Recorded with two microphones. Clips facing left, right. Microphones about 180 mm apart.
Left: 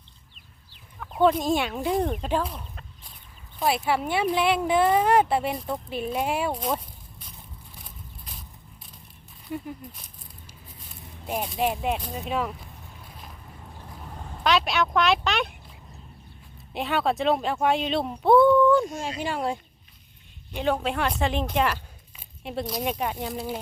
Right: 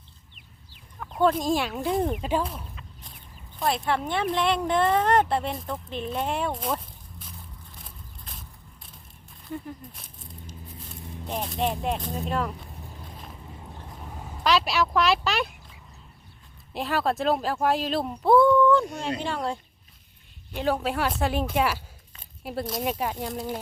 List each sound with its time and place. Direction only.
1.2 s speech: centre (ahead or behind)
7.8 s a sound: centre (ahead or behind)
11.3 s speech: 5° left (ahead or behind)
14.4 s speech: centre (ahead or behind)
16.7 s speech: centre (ahead or behind)
18.9 s speech: 60° right (ahead or behind)
19.2 s speech: 5° left (ahead or behind)